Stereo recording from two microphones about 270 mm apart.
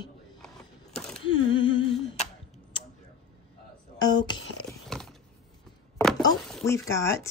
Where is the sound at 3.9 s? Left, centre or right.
Centre.